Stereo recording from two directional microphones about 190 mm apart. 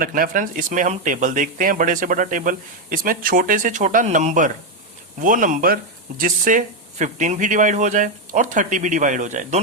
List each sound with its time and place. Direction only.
0.0 s speech: 45° right (ahead or behind)